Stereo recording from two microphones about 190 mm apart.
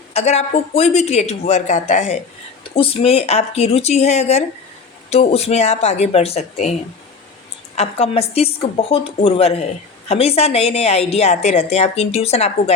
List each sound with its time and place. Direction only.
0.1 s a woman's voice: 35° left (ahead or behind)
7.8 s a woman's voice: 30° left (ahead or behind)